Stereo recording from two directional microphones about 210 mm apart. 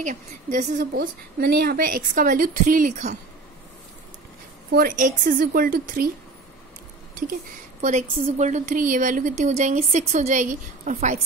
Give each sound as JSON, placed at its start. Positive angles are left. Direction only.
{"t": 0.0, "sound": "a woman's voice", "side_deg": -35}
{"t": 1.4, "sound": "a woman's voice", "side_deg": -45}
{"t": 4.7, "sound": "a woman's voice", "side_deg": -40}
{"t": 7.8, "sound": "a woman's voice", "side_deg": -35}